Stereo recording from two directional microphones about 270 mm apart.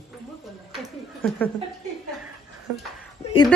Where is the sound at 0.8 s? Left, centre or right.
Centre.